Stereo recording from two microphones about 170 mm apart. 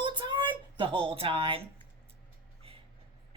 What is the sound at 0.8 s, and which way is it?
Speech, 30° right (ahead or behind).